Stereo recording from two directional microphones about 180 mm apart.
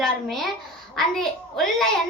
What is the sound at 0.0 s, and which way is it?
A child's voice, centre (ahead or behind).